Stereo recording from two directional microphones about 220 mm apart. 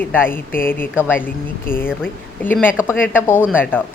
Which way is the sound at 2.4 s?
10° left (ahead or behind).